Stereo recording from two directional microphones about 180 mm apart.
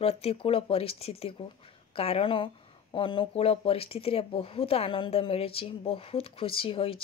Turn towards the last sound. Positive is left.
turn(degrees=30)  # may be behind; listen again after turning